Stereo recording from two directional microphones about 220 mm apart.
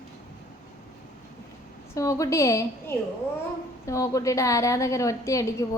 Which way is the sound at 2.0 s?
15° left (ahead or behind).